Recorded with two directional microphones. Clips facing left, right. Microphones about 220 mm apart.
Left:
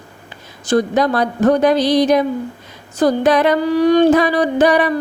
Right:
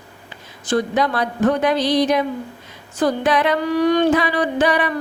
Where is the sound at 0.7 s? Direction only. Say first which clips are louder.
Left 4 dB; 40° left (ahead or behind).